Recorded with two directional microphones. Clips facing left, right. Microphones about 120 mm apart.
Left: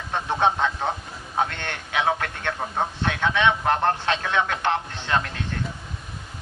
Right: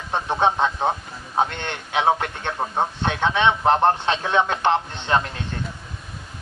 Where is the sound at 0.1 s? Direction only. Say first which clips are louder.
Right 2 dB; 20° right (ahead or behind).